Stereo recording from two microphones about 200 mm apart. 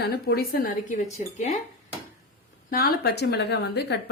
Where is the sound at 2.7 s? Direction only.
50° left (ahead or behind).